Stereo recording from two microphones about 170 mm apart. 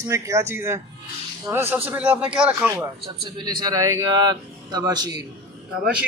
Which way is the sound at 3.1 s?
25° right (ahead or behind).